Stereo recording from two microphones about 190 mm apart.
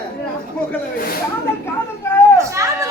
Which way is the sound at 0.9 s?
50° left (ahead or behind).